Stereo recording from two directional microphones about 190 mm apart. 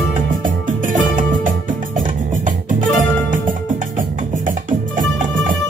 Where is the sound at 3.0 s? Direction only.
45° right (ahead or behind).